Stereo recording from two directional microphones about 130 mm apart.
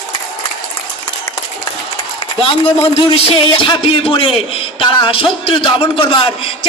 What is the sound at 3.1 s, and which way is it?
A woman's voice, 45° left (ahead or behind).